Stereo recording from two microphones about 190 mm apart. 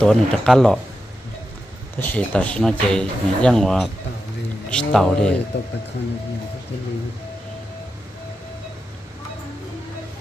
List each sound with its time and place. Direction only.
0.0 s speech: 5° left (ahead or behind)
2.0 s speech: 5° left (ahead or behind)
5.5 s speech: 65° left (ahead or behind)